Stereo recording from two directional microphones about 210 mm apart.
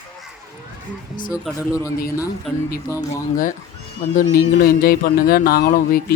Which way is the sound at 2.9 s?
15° left (ahead or behind).